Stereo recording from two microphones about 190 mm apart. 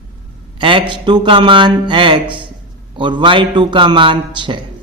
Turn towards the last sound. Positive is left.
turn(degrees=-25)  # may be behind; listen again after turning